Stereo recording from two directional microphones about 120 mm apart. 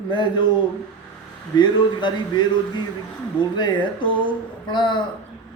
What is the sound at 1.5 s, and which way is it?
Speech, 40° left (ahead or behind).